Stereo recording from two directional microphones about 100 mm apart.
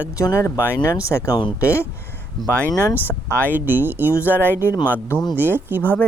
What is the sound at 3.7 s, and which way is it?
Speech, 20° right (ahead or behind).